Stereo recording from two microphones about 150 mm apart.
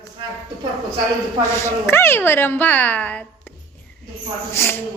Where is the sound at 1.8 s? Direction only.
15° left (ahead or behind).